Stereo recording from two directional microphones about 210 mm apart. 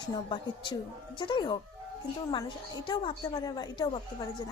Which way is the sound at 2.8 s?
20° left (ahead or behind).